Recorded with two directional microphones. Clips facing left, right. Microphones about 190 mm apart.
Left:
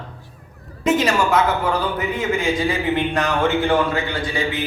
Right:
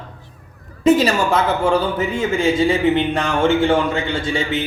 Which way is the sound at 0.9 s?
35° right (ahead or behind).